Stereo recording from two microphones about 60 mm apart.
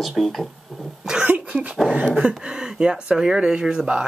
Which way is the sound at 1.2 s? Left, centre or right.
Right.